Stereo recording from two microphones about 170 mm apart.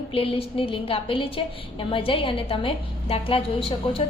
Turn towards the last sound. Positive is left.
turn(degrees=35)  # may be behind; listen again after turning